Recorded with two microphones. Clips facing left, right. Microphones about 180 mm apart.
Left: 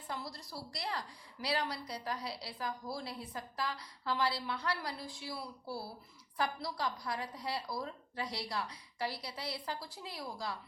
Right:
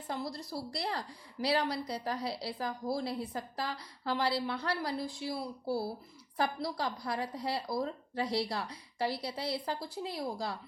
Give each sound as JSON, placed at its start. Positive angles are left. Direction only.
{"t": 0.1, "sound": "a woman's voice", "side_deg": -25}